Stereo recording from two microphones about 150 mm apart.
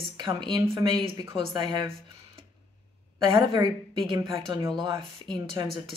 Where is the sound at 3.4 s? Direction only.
25° right (ahead or behind).